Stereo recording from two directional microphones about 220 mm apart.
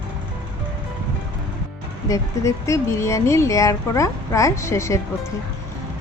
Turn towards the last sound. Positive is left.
turn(degrees=10)  # may be behind; listen again after turning